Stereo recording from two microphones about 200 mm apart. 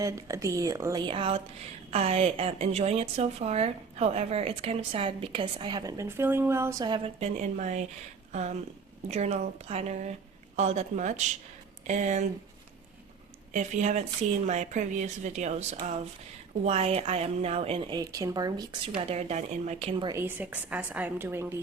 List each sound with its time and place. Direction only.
0.0 s a woman's voice: 15° right (ahead or behind); by 12.2 s 35° right (ahead or behind)
13.5 s a woman's voice: 35° right (ahead or behind); by 18.8 s 20° right (ahead or behind)
18.9 s speech: 30° right (ahead or behind)
20.1 s a woman's voice: 10° right (ahead or behind)